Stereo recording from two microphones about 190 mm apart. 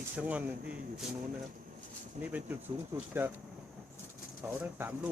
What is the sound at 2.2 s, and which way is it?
Speech, 40° right (ahead or behind).